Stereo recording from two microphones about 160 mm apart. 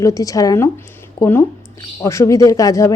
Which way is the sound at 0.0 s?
20° left (ahead or behind).